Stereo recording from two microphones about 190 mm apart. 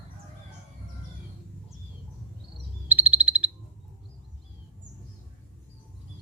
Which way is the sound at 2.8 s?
10° right (ahead or behind).